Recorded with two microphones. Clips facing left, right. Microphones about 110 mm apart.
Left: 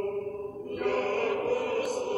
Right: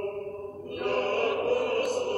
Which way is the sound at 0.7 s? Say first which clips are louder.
Right 1 dB; 60° right (ahead or behind).